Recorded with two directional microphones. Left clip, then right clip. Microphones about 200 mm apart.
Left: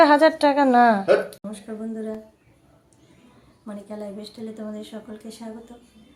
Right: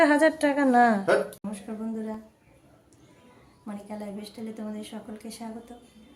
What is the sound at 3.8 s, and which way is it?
A woman's voice, 10° right (ahead or behind).